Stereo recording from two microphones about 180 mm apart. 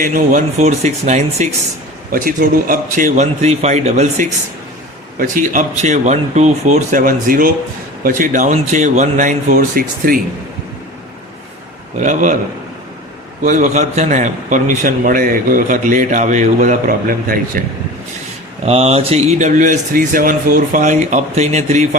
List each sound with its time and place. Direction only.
0.0 s speech: 50° right (ahead or behind)
5.1 s a man's voice: 50° right (ahead or behind)
11.9 s a man's voice: 45° right (ahead or behind)
13.4 s a man's voice: 45° right (ahead or behind)
18.6 s speech: 35° right (ahead or behind)